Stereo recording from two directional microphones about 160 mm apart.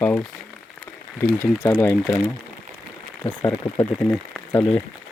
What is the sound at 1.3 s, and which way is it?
Speech, 10° left (ahead or behind).